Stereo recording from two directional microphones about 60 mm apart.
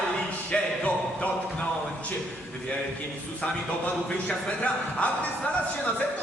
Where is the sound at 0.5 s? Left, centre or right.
Centre.